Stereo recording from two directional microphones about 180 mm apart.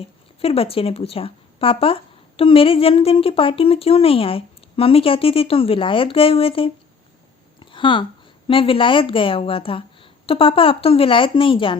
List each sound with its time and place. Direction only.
0.4 s speech: 30° left (ahead or behind)
7.6 s a sound: 25° left (ahead or behind)
8.4 s a woman's voice: 30° left (ahead or behind)